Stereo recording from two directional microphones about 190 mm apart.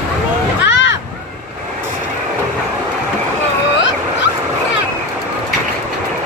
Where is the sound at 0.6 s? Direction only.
70° left (ahead or behind).